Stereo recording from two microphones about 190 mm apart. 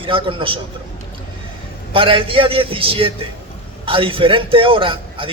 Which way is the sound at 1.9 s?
30° right (ahead or behind).